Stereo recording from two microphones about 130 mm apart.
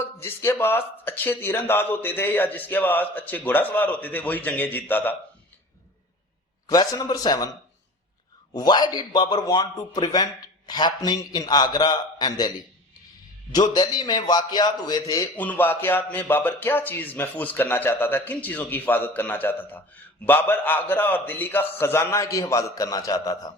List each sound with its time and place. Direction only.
0.0 s speech: 15° left (ahead or behind)
6.7 s a man's voice: 30° left (ahead or behind)
8.5 s a man's voice: 30° left (ahead or behind)
13.5 s a man's voice: 30° left (ahead or behind)
15.4 s a man's voice: 15° left (ahead or behind); by 23.5 s 30° left (ahead or behind)